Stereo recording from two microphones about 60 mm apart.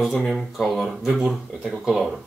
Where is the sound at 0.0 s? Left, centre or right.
Centre.